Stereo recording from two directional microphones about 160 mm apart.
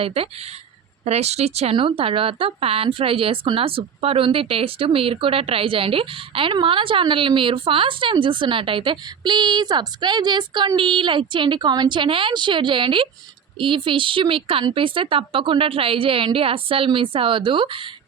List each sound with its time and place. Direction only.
0.0 s a woman's voice: 35° right (ahead or behind)